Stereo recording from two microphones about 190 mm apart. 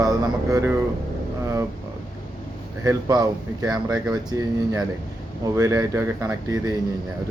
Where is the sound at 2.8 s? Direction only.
20° right (ahead or behind).